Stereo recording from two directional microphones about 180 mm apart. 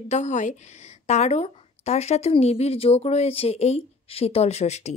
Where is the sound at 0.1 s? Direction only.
40° left (ahead or behind).